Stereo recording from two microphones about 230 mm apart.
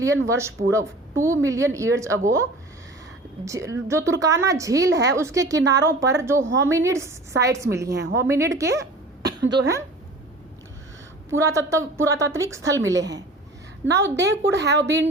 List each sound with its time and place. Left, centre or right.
0.3 s a woman's voice: centre
7.9 s a woman's voice: right
8.3 s a woman's voice: centre
11.3 s a woman's voice: centre
13.8 s a woman's voice: right